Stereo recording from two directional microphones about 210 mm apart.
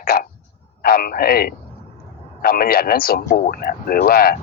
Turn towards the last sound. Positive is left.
turn(degrees=45)  # may be behind; listen again after turning